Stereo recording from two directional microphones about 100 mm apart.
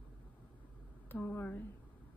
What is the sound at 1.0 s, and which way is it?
Speech, 20° left (ahead or behind).